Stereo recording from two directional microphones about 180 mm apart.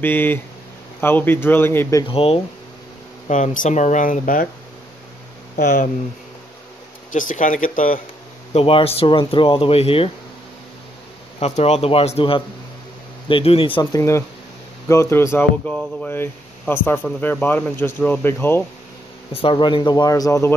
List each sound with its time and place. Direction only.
0.0 s speech: 10° left (ahead or behind)
2.0 s speech: 30° left (ahead or behind)
3.3 s speech: 45° left (ahead or behind)
5.6 s speech: 55° left (ahead or behind)
7.1 s speech: 45° left (ahead or behind)
8.5 s speech: 30° left (ahead or behind)
11.3 s speech: 35° left (ahead or behind)
13.9 s speech: 15° left (ahead or behind)
19.3 s speech: 30° left (ahead or behind)